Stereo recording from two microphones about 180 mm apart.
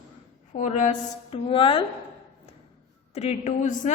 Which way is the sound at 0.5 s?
40° left (ahead or behind).